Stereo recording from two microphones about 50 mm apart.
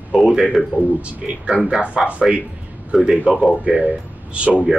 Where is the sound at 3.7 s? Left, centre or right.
Right.